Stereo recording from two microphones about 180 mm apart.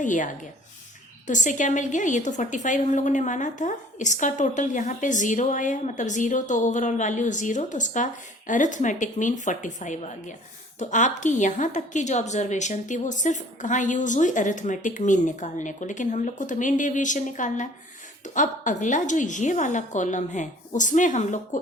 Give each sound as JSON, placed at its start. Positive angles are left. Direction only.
{"t": 0.0, "sound": "a woman's voice", "side_deg": 45}
{"t": 1.3, "sound": "a woman's voice", "side_deg": 45}